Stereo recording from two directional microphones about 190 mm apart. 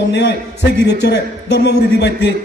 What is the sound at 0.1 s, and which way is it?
A man's voice, 65° left (ahead or behind).